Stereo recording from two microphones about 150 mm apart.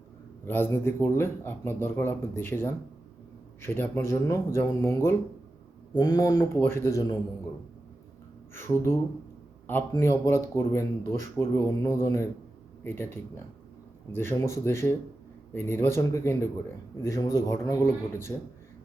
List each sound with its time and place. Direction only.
0.4 s speech: 15° left (ahead or behind)
8.5 s speech: 15° left (ahead or behind)